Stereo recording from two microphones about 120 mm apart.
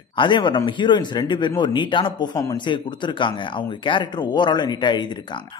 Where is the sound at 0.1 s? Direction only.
40° left (ahead or behind).